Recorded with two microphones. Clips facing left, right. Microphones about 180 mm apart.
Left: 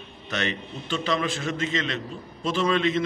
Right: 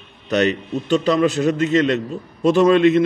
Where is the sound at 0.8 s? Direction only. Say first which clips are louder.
Right 10 dB; 40° right (ahead or behind).